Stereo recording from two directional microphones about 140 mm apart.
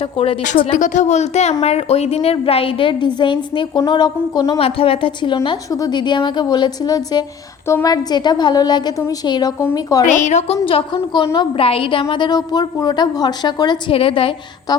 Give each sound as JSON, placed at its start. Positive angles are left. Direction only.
{"t": 0.0, "sound": "a woman's voice", "side_deg": 40}
{"t": 0.7, "sound": "a woman's voice", "side_deg": 60}
{"t": 4.6, "sound": "a woman's voice", "side_deg": 40}
{"t": 10.1, "sound": "a woman's voice", "side_deg": 60}
{"t": 10.7, "sound": "a woman's voice", "side_deg": 40}